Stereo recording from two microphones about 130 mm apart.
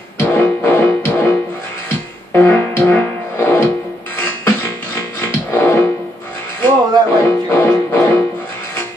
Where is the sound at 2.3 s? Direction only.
15° left (ahead or behind).